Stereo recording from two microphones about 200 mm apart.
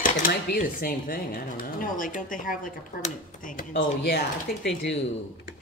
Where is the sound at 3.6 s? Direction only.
60° left (ahead or behind).